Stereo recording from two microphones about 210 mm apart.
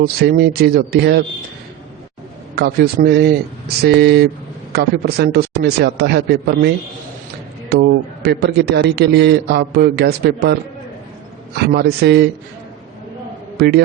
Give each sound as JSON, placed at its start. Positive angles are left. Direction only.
{"t": 0.0, "sound": "a man's voice", "side_deg": -45}
{"t": 2.6, "sound": "a man's voice", "side_deg": -50}
{"t": 7.7, "sound": "a man's voice", "side_deg": -50}
{"t": 13.6, "sound": "a man's voice", "side_deg": -50}